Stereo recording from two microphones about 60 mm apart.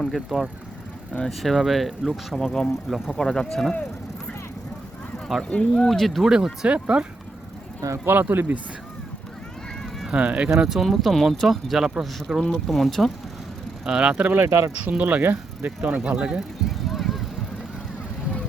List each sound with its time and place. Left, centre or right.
0.1 s speech: centre
5.4 s speech: centre
5.7 s speech: centre
6.2 s speech: centre
8.0 s speech: right
10.1 s speech: right
10.6 s speech: centre
12.4 s speech: centre
13.8 s speech: centre
14.3 s speech: right
14.9 s speech: right
16.0 s speech: centre
16.6 s vehicle: centre